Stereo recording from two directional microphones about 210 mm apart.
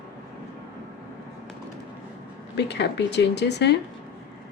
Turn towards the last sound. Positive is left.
turn(degrees=55)  # may be behind; listen again after turning